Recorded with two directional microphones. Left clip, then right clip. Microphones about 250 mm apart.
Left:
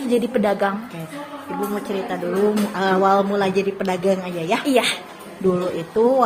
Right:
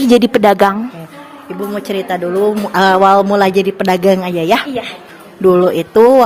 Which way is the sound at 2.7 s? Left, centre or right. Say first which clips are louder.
Right 11 dB; right.